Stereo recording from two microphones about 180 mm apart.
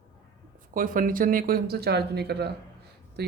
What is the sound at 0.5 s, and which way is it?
Speech, 50° right (ahead or behind).